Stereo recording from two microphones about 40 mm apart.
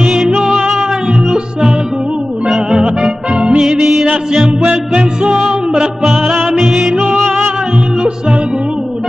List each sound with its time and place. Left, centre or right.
0.1 s music: centre
2.8 s music: right
4.6 s music: right
5.5 s music: centre